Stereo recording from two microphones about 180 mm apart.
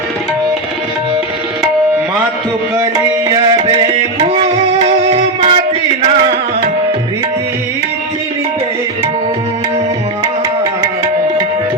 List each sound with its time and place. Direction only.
3.0 s music: 20° right (ahead or behind)